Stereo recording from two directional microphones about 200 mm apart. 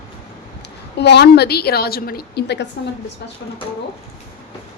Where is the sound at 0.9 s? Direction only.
60° left (ahead or behind).